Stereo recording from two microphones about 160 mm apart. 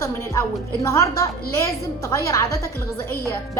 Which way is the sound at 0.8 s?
20° left (ahead or behind).